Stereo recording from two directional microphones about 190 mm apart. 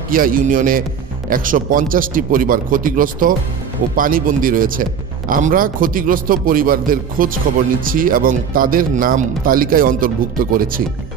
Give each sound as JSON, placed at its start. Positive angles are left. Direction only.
{"t": 0.1, "sound": "speech", "side_deg": -45}